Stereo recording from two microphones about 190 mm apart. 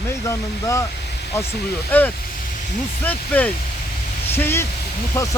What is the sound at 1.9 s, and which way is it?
Speech, 10° left (ahead or behind).